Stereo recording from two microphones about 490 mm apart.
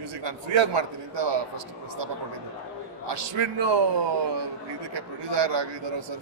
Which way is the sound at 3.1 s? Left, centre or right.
Right.